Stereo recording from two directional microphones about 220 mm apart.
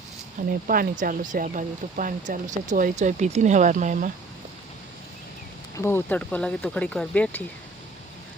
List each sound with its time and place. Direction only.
0.4 s speech: 35° right (ahead or behind)
5.7 s speech: 10° left (ahead or behind)